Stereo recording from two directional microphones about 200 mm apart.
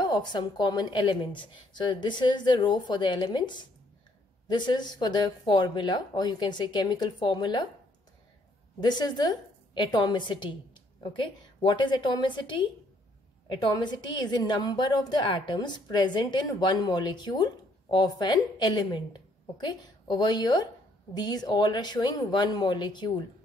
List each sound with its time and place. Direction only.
0.0 s a woman's voice: 20° left (ahead or behind)
8.8 s a woman's voice: 20° left (ahead or behind)